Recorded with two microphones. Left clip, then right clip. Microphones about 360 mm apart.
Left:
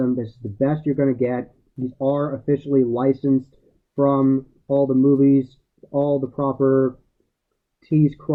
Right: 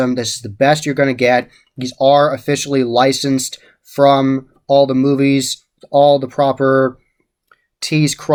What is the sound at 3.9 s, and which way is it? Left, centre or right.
Speech, centre.